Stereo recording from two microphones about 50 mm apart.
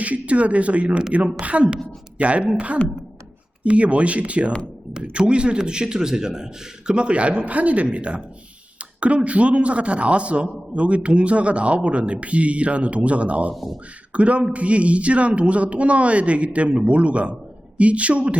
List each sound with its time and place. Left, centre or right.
0.0 s a woman's voice: right
3.6 s speech: right
13.5 s speech: centre
14.1 s speech: right